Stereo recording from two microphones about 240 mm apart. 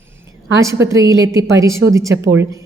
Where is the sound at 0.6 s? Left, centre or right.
Centre.